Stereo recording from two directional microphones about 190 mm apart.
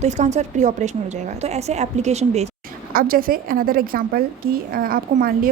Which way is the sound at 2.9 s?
50° right (ahead or behind).